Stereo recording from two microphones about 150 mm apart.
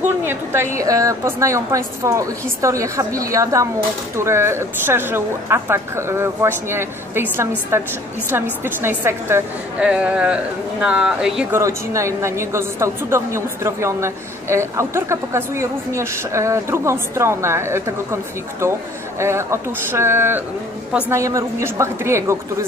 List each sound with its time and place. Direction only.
0.2 s a woman's voice: 15° right (ahead or behind)
11.5 s a woman's voice: 20° right (ahead or behind)